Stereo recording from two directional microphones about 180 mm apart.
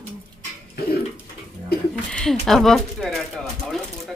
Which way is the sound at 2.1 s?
5° left (ahead or behind).